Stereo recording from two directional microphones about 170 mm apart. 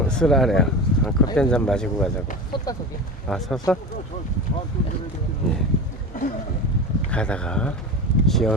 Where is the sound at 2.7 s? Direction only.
20° left (ahead or behind).